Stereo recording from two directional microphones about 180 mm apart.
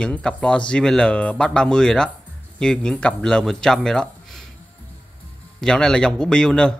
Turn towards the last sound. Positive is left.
turn(degrees=5)  # may be behind; listen again after turning